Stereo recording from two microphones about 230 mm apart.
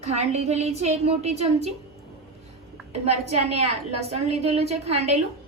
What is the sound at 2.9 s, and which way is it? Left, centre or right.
A woman's voice, right.